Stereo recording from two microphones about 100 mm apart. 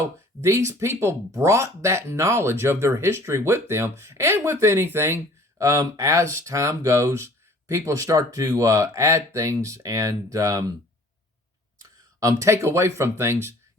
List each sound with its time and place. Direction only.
0.4 s speech: 30° right (ahead or behind)
11.8 s speech: 35° right (ahead or behind)